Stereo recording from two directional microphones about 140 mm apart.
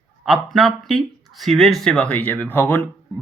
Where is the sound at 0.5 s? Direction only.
Centre (ahead or behind).